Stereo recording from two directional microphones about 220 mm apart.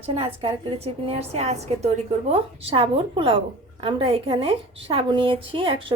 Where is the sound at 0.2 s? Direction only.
25° right (ahead or behind).